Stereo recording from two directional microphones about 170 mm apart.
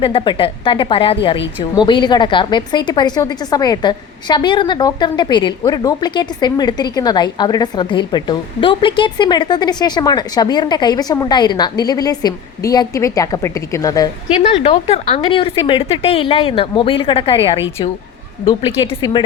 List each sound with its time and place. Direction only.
0.0 s a woman's voice: 30° left (ahead or behind)
14.5 s speech: 35° left (ahead or behind)